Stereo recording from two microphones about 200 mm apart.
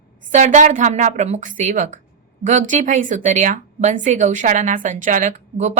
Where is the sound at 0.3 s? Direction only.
35° right (ahead or behind).